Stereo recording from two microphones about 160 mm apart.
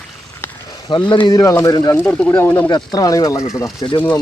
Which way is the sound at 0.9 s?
30° left (ahead or behind).